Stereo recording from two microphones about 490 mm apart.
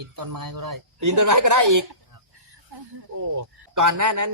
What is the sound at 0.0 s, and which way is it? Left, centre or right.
Speech, right.